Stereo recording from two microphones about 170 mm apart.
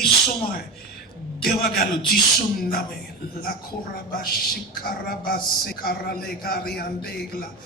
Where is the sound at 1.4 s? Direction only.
65° left (ahead or behind).